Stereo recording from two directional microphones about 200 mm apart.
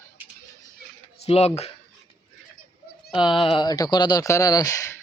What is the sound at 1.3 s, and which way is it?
Speech, 30° left (ahead or behind).